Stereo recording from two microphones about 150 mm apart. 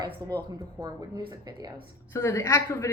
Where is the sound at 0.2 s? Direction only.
25° right (ahead or behind).